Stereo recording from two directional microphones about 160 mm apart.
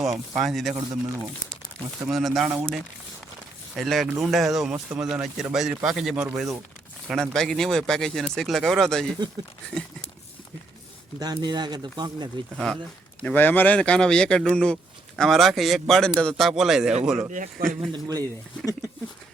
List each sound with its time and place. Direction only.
0.3 s speech: centre (ahead or behind)
2.0 s speech: centre (ahead or behind)
3.8 s speech: centre (ahead or behind)
11.2 s speech: 25° right (ahead or behind)
12.5 s speech: centre (ahead or behind)
17.3 s speech: 50° right (ahead or behind)
17.7 s speech: 25° right (ahead or behind)